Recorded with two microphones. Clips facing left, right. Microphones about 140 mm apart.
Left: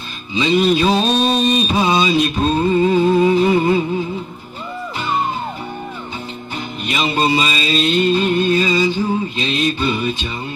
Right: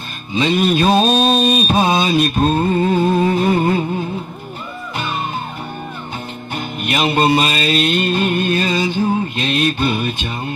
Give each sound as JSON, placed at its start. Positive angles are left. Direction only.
{"t": 0.3, "sound": "mantra", "side_deg": -55}
{"t": 3.3, "sound": "a sound", "side_deg": -50}
{"t": 4.9, "sound": "music", "side_deg": -60}
{"t": 6.5, "sound": "music", "side_deg": -55}